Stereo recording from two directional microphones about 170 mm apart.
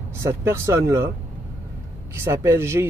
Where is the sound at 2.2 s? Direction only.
15° right (ahead or behind).